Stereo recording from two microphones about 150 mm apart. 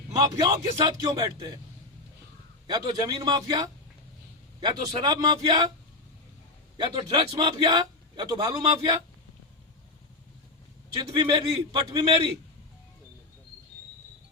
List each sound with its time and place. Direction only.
0.2 s a man's voice: 25° right (ahead or behind)
2.6 s a man's voice: 30° right (ahead or behind)
4.6 s a man's voice: 30° right (ahead or behind)
6.7 s a man's voice: 30° right (ahead or behind)
10.9 s a man's voice: 30° right (ahead or behind)